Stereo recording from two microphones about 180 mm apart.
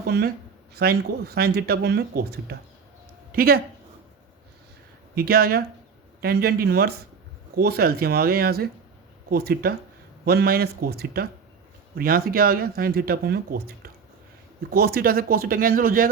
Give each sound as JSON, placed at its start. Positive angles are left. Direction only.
{"t": 0.0, "sound": "a sound", "side_deg": -60}
{"t": 0.8, "sound": "speech", "side_deg": -60}
{"t": 5.1, "sound": "speech", "side_deg": -55}